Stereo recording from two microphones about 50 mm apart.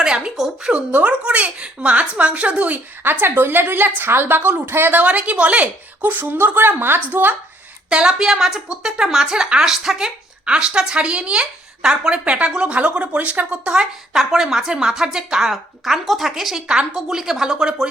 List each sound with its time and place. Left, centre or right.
0.0 s speech: centre
0.7 s speech: right
3.0 s a woman's voice: right
4.9 s a woman's voice: right
7.9 s speech: centre
10.4 s speech: centre
14.2 s speech: centre
15.8 s a woman's voice: centre